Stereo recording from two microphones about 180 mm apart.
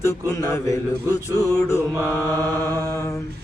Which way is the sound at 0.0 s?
20° left (ahead or behind).